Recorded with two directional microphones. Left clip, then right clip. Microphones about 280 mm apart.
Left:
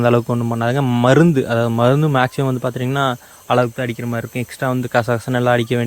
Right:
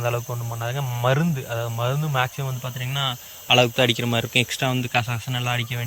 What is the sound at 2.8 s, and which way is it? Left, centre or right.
Speech, left.